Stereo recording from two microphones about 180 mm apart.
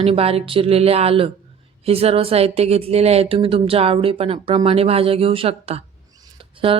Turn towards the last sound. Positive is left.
turn(degrees=-30)  # may be behind; listen again after turning